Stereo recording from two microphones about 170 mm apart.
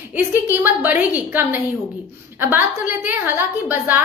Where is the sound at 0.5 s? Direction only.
10° right (ahead or behind).